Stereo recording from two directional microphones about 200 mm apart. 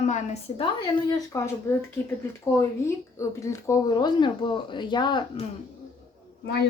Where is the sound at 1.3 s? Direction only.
15° left (ahead or behind).